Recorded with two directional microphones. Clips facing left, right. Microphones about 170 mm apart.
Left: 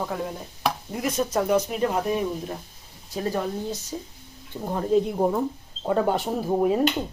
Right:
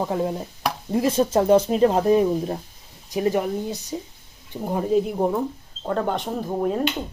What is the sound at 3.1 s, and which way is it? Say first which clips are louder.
A woman's voice: right 5 dB; 15° right (ahead or behind).